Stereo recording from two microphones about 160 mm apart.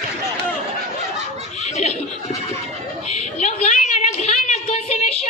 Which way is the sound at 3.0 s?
45° left (ahead or behind).